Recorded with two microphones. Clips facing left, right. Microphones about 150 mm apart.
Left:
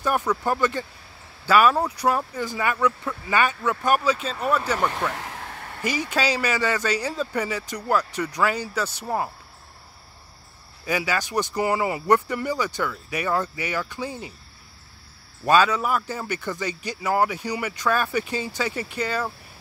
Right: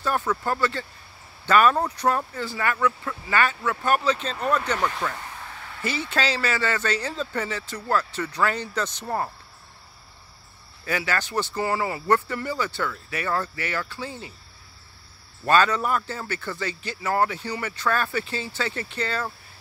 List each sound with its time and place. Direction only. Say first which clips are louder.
0.0 s speech: left 2 dB; 15° left (ahead or behind)
5.1 s vehicle: left 3 dB; 80° left; by 5.9 s 50° left (ahead or behind)
5.9 s speech: left 2 dB; 15° left (ahead or behind)
10.9 s speech: left 2 dB; 10° left (ahead or behind)
15.4 s speech: left 1 dB; 10° left (ahead or behind)